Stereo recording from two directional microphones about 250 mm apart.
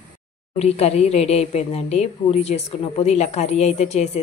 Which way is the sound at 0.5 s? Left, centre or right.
Left.